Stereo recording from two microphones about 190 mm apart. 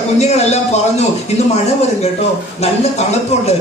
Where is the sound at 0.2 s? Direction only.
35° left (ahead or behind).